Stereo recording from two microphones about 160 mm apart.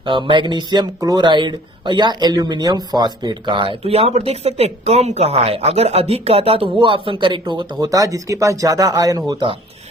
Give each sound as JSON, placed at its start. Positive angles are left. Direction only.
{"t": 0.0, "sound": "speech", "side_deg": -30}